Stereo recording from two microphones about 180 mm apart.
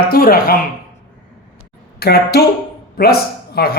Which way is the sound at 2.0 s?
60° left (ahead or behind).